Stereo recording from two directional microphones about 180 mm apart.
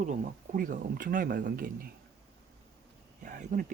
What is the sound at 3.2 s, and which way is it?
Speech, 45° right (ahead or behind).